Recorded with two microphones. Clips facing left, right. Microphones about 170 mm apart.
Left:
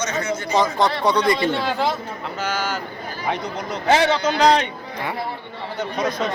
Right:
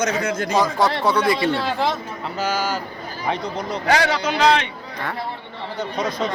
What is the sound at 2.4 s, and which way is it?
Speech, 40° right (ahead or behind).